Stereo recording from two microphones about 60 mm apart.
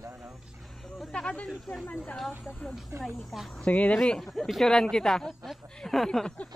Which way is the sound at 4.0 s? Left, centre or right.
Centre.